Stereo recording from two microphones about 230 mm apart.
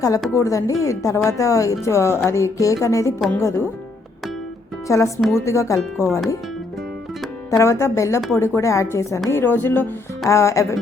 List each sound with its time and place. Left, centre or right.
0.3 s speech: centre
4.9 s speech: centre
7.5 s speech: centre